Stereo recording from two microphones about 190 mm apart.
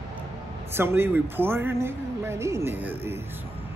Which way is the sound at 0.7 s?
10° right (ahead or behind).